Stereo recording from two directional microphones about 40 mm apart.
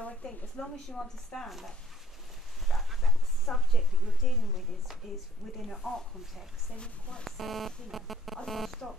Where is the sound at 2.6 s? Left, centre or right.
Centre.